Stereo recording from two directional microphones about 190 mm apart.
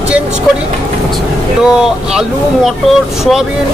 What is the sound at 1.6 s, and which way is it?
Speech, 5° right (ahead or behind).